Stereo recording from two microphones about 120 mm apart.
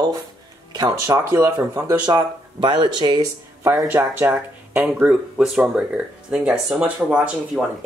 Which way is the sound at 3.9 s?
20° right (ahead or behind).